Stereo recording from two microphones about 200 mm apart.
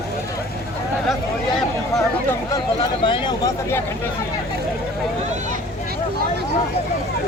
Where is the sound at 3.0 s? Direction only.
25° left (ahead or behind).